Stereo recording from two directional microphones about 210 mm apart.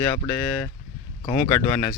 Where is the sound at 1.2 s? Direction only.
10° left (ahead or behind).